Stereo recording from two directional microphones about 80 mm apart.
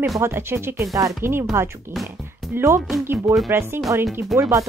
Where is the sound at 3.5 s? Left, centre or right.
Right.